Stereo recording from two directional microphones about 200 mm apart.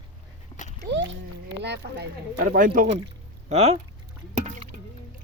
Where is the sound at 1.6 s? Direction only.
55° right (ahead or behind).